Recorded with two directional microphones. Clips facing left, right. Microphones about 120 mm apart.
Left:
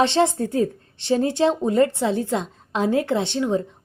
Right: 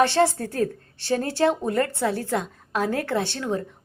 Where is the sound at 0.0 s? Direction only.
20° left (ahead or behind).